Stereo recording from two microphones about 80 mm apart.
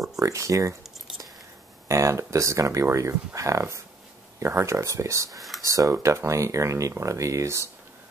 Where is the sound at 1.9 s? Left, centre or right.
Right.